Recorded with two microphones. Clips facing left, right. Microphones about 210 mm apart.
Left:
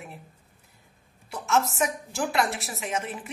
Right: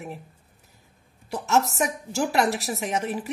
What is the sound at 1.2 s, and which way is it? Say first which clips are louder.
A woman's voice: right 2 dB; 40° right (ahead or behind).